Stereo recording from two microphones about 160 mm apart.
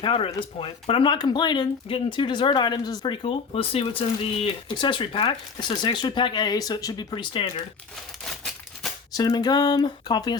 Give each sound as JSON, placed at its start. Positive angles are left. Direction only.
{"t": 0.0, "sound": "speech", "side_deg": 35}
{"t": 9.1, "sound": "speech", "side_deg": 25}